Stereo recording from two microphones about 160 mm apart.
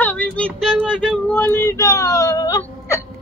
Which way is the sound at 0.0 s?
10° left (ahead or behind).